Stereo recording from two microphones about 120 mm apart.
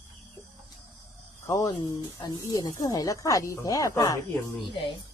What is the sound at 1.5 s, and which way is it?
Speech, 25° left (ahead or behind).